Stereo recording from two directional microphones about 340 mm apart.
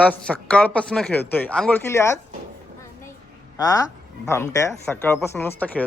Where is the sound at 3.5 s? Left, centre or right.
Centre.